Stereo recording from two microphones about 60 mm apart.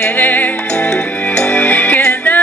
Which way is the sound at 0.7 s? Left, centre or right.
Centre.